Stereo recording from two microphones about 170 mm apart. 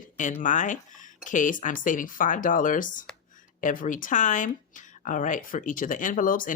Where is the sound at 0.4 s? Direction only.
45° left (ahead or behind).